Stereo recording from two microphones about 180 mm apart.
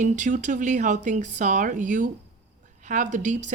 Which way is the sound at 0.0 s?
45° right (ahead or behind).